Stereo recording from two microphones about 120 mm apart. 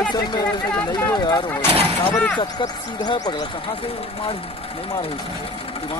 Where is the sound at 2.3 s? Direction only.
35° left (ahead or behind).